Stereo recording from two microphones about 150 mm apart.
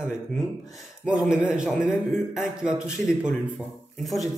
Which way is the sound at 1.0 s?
5° right (ahead or behind).